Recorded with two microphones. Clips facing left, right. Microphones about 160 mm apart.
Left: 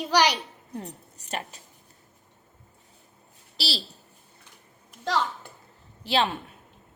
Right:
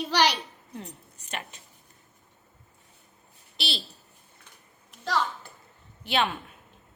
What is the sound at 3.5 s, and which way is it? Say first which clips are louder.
Speech: left 2 dB; 35° left (ahead or behind).